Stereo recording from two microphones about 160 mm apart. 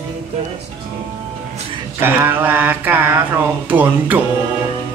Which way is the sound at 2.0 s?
10° right (ahead or behind).